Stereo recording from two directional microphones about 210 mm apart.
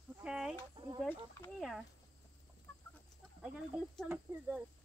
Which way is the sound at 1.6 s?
Centre (ahead or behind).